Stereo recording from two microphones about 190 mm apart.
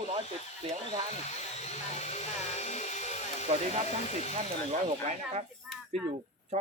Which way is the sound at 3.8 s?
35° left (ahead or behind).